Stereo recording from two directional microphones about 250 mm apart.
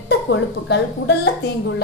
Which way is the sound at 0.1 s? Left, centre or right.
Left.